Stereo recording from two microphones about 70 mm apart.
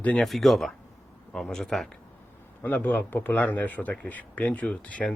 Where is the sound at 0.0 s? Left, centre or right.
Centre.